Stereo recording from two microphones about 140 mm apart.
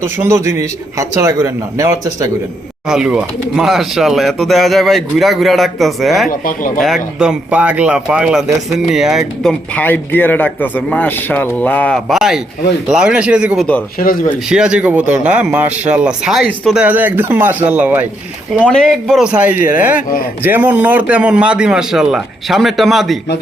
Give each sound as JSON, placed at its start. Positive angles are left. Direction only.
{"t": 0.0, "sound": "a man's voice", "side_deg": -20}
{"t": 2.9, "sound": "speech", "side_deg": -5}
{"t": 6.2, "sound": "speech", "side_deg": 85}
{"t": 6.8, "sound": "a man's voice", "side_deg": -5}
{"t": 14.0, "sound": "speech", "side_deg": 90}
{"t": 14.5, "sound": "a man's voice", "side_deg": -5}
{"t": 16.8, "sound": "a man's voice", "side_deg": -10}
{"t": 18.6, "sound": "speech", "side_deg": 5}
{"t": 19.3, "sound": "a man's voice", "side_deg": -10}